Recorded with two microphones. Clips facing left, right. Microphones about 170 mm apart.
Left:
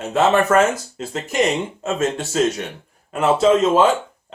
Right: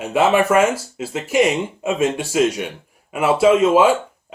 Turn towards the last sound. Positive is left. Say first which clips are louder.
# right 1 dB
turn(degrees=-10)  # may be behind; listen again after turning